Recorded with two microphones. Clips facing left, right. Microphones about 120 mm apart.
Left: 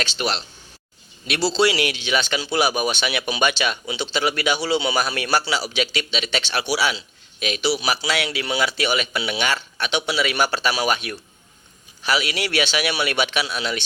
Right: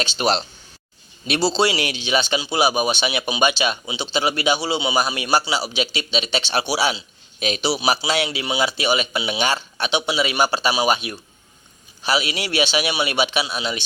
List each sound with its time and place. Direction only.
0.0 s speech: 30° right (ahead or behind)
1.5 s a man's voice: 25° right (ahead or behind)